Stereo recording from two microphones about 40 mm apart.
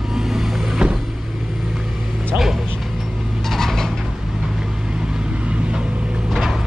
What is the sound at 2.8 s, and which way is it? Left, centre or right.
Vehicle, centre.